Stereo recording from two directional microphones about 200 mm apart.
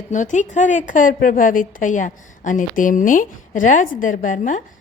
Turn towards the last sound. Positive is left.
turn(degrees=40)  # may be behind; listen again after turning